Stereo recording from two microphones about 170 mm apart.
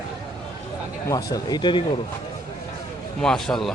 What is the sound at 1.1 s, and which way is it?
Speech, 20° left (ahead or behind).